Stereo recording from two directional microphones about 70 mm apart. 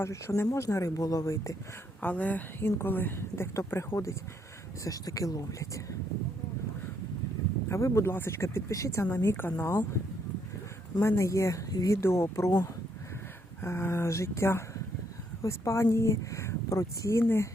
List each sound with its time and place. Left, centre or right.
0.0 s speech: left
2.0 s a woman's voice: left
4.8 s speech: left
7.7 s speech: left
9.1 s speech: left
11.0 s speech: left
11.7 s speech: left
11.9 s speech: left
13.6 s speech: left